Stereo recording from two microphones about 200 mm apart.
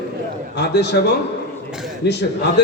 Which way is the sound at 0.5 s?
60° left (ahead or behind).